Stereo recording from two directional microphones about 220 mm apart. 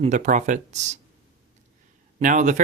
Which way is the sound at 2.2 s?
35° right (ahead or behind).